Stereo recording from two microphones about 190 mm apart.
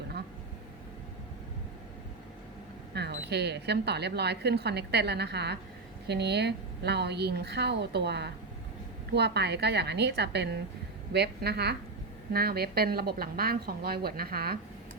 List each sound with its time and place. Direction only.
2.9 s a woman's voice: 65° right (ahead or behind)